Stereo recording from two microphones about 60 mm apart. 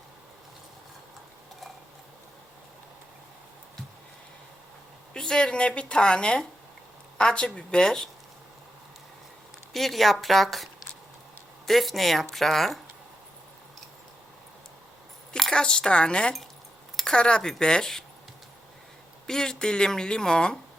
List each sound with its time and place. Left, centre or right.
5.1 s a woman's voice: centre
9.7 s speech: centre
15.4 s a woman's voice: centre
19.3 s a woman's voice: centre